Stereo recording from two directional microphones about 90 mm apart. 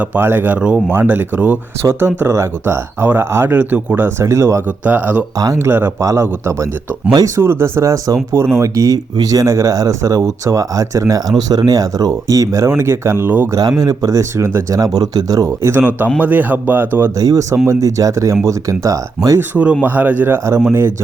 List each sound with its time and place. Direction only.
0.0 s speech: 20° right (ahead or behind)
1.8 s speech: 30° right (ahead or behind)
4.9 s speech: 15° right (ahead or behind)
13.5 s speech: 40° right (ahead or behind)
14.9 s speech: 45° right (ahead or behind)
16.1 s speech: 20° right (ahead or behind)
17.2 s speech: 40° right (ahead or behind)
19.4 s speech: 15° right (ahead or behind)